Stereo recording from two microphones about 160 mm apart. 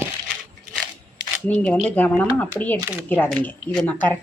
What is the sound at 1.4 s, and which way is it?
A woman's voice, 10° left (ahead or behind).